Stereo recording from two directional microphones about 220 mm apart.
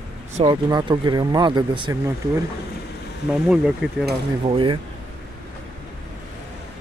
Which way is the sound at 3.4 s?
5° right (ahead or behind).